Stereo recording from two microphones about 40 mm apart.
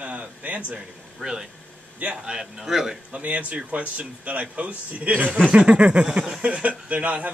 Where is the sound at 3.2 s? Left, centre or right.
Right.